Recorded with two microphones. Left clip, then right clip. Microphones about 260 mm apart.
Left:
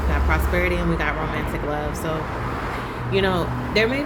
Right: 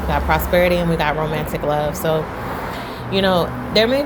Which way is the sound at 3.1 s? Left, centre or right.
Centre.